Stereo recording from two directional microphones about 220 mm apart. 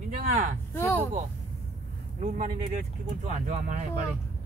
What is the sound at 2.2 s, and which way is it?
Speech, 35° right (ahead or behind).